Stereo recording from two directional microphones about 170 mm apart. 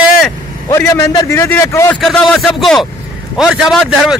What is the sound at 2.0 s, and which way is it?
A man's voice, centre (ahead or behind).